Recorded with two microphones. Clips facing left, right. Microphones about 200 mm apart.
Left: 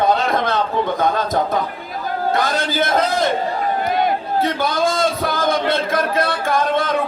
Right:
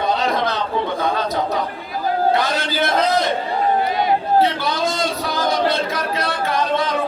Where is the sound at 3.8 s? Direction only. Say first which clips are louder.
Even; 50° left (ahead or behind).